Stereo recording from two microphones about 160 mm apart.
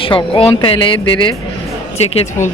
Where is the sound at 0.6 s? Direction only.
35° left (ahead or behind).